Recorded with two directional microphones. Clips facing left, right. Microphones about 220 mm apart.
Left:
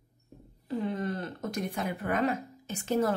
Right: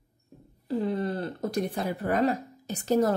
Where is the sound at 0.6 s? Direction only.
35° right (ahead or behind).